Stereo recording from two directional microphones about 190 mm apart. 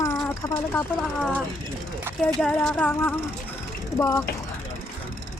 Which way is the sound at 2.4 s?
5° left (ahead or behind).